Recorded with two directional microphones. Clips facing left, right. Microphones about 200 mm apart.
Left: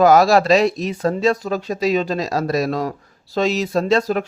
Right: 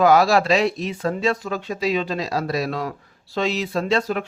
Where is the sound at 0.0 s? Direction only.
40° left (ahead or behind).